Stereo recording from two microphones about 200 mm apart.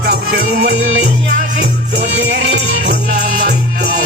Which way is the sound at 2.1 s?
60° right (ahead or behind).